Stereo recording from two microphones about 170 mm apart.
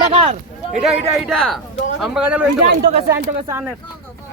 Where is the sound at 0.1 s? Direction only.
35° right (ahead or behind).